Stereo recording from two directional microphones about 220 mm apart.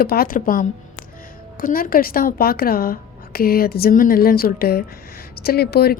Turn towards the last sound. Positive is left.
turn(degrees=45)  # may be behind; listen again after turning